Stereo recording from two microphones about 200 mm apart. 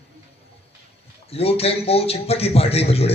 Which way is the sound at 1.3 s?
30° left (ahead or behind).